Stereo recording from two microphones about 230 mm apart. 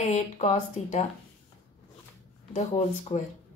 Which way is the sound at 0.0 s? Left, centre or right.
Left.